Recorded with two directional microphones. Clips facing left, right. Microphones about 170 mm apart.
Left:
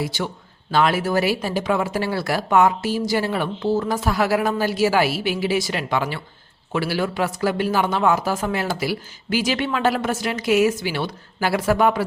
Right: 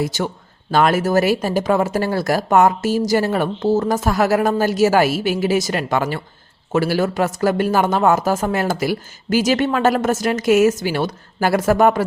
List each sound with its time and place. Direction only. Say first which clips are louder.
0.0 s speech: right 4 dB; 45° right (ahead or behind)